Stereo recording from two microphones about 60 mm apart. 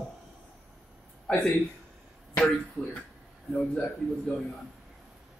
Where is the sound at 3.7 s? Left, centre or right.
Left.